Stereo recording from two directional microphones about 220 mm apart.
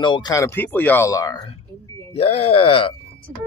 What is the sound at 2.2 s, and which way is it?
Speech, 25° left (ahead or behind).